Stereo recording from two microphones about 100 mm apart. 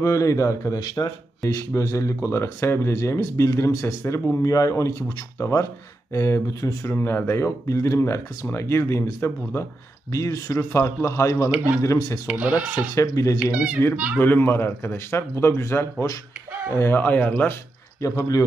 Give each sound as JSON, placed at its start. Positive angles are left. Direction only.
{"t": 0.0, "sound": "speech", "side_deg": 30}
{"t": 0.7, "sound": "speech", "side_deg": 45}
{"t": 12.3, "sound": "speech", "side_deg": -15}
{"t": 12.9, "sound": "speech", "side_deg": 35}
{"t": 18.0, "sound": "speech", "side_deg": 35}